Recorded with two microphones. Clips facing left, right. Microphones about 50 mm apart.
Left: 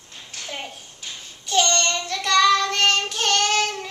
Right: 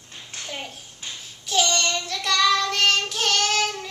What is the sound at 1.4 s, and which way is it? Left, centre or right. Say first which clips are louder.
Child singing: left 2 dB; centre.